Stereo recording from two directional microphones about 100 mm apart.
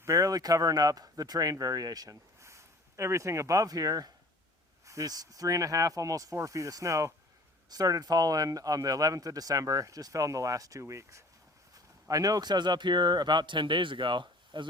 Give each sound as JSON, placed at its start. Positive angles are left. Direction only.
{"t": 0.0, "sound": "a man's voice", "side_deg": -30}